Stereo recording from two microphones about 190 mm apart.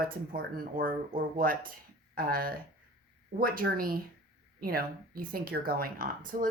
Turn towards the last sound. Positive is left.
turn(degrees=-45)  # may be behind; listen again after turning